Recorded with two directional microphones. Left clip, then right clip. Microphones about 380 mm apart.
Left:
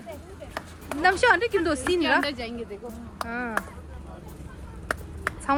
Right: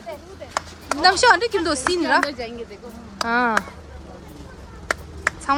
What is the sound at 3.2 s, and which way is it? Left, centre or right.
Speech, right.